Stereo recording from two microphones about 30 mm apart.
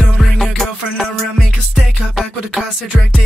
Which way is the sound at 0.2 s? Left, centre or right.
Centre.